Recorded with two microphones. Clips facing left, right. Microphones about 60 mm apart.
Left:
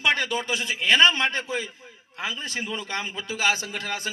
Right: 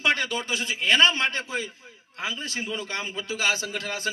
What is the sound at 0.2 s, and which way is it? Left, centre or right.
A man's voice, left.